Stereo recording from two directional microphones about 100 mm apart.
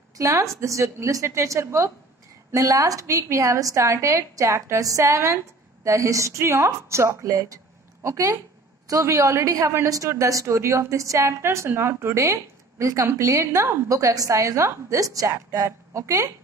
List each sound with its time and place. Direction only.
0.2 s a woman's voice: 30° right (ahead or behind)